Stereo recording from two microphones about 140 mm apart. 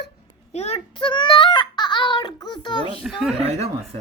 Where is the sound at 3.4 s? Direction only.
50° right (ahead or behind).